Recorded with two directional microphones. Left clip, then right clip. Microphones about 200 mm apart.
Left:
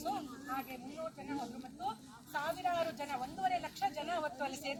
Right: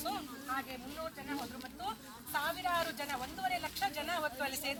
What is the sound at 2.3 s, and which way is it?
A woman's voice, 25° left (ahead or behind).